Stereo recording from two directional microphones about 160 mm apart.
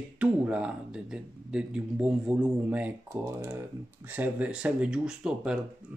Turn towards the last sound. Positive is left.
turn(degrees=-5)  # may be behind; listen again after turning